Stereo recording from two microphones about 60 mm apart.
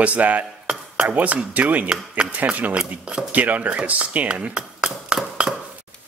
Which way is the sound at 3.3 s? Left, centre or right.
Right.